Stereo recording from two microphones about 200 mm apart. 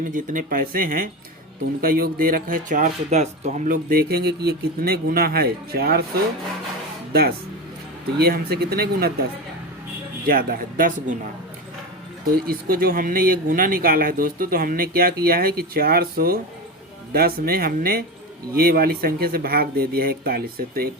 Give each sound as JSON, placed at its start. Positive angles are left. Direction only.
{"t": 0.1, "sound": "speech", "side_deg": -40}
{"t": 7.1, "sound": "speech", "side_deg": -50}
{"t": 10.2, "sound": "speech", "side_deg": -45}
{"t": 12.5, "sound": "speech", "side_deg": -45}